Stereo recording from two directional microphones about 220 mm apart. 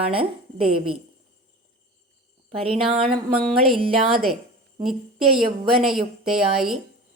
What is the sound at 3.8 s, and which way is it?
Speech, 25° right (ahead or behind).